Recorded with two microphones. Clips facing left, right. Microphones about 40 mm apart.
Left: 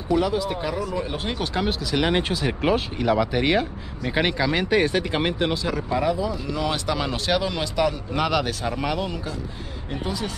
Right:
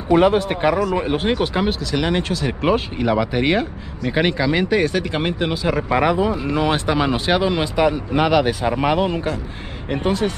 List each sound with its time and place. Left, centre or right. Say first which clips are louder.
0.1 s speech: right 7 dB; right
1.7 s speech: right 2 dB; centre
2.6 s speech: right 4 dB; centre
5.7 s speech: right 5 dB; right
6.3 s speech: right 6 dB; right
9.8 s speech: right 9 dB; right